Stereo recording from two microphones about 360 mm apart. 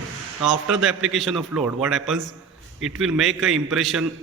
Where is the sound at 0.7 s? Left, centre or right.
Centre.